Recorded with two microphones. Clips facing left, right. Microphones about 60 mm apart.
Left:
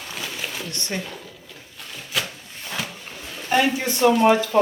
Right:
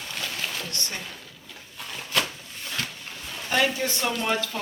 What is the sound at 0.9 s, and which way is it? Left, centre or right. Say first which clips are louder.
Speech: left 7 dB; centre.